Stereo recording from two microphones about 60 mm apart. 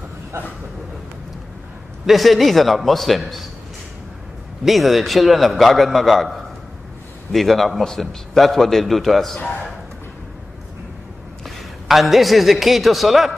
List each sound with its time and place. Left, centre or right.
2.0 s a man's voice: centre
4.6 s a man's voice: centre
9.4 s speech: left
11.4 s a woman's voice: centre